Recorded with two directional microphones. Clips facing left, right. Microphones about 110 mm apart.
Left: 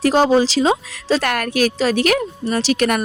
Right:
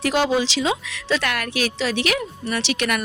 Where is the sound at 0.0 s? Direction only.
40° left (ahead or behind).